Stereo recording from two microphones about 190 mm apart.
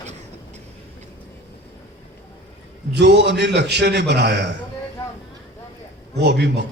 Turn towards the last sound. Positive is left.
turn(degrees=-60)  # may be behind; listen again after turning